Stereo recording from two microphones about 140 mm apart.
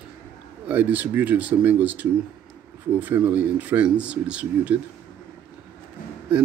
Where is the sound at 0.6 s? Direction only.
10° right (ahead or behind).